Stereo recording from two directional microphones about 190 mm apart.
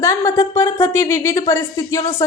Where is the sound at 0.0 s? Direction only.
15° left (ahead or behind).